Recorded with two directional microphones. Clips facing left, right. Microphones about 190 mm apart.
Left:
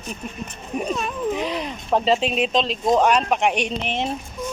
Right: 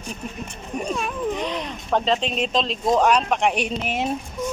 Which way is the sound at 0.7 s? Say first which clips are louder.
Left 1 dB; 5° left (ahead or behind).